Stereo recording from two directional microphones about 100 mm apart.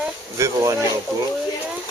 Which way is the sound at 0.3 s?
30° right (ahead or behind).